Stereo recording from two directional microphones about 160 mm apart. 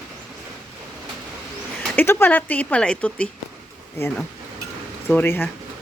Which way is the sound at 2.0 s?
15° left (ahead or behind).